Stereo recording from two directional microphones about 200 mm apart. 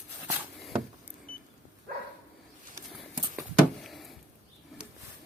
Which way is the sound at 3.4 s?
Centre (ahead or behind).